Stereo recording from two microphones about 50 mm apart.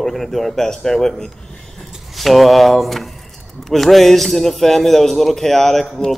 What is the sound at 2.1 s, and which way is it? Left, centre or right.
A man's voice, centre.